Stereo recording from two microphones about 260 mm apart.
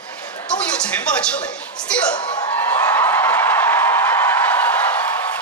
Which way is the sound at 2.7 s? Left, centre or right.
Centre.